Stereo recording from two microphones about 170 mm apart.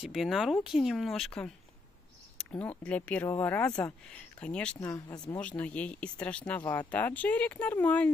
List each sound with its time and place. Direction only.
0.0 s speech: centre (ahead or behind)
4.7 s speech: 20° left (ahead or behind)
5.3 s speech: 5° left (ahead or behind)